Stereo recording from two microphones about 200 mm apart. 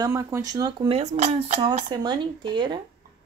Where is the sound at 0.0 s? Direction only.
15° right (ahead or behind).